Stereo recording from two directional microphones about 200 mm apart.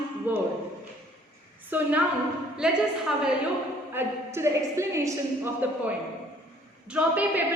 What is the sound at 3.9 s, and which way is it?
A woman's voice, 15° right (ahead or behind).